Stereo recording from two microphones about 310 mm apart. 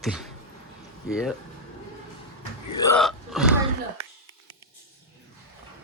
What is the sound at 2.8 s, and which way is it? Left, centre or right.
Burping, centre.